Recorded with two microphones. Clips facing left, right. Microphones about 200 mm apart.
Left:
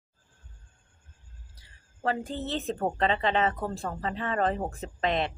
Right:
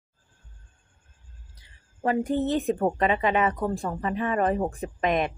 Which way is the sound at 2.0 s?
20° right (ahead or behind).